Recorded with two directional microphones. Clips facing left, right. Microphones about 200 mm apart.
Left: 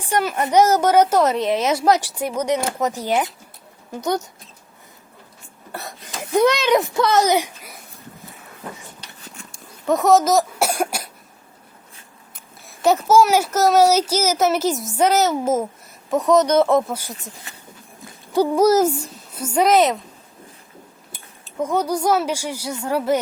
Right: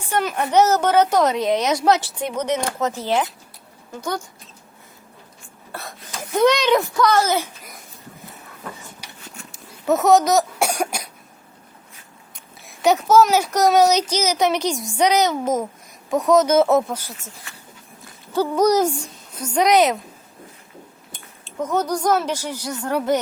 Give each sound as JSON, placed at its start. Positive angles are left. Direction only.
{"t": 0.1, "sound": "a woman's voice", "side_deg": 10}
{"t": 6.3, "sound": "a woman's voice", "side_deg": 10}
{"t": 9.0, "sound": "a sound", "side_deg": -10}
{"t": 9.5, "sound": "cough", "side_deg": -5}
{"t": 12.6, "sound": "speech", "side_deg": 0}
{"t": 16.9, "sound": "a woman's voice", "side_deg": 10}
{"t": 18.3, "sound": "a woman's voice", "side_deg": 5}
{"t": 21.1, "sound": "a woman's voice", "side_deg": 10}